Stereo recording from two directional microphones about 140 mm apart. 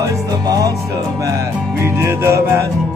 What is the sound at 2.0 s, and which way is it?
Music, 20° right (ahead or behind).